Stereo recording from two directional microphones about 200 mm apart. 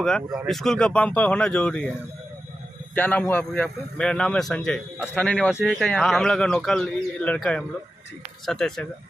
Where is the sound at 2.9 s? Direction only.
10° left (ahead or behind).